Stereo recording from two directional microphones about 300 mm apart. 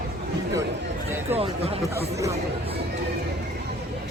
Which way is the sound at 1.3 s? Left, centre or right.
Centre.